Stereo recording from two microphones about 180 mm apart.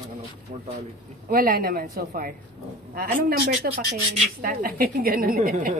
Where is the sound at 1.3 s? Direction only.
55° right (ahead or behind).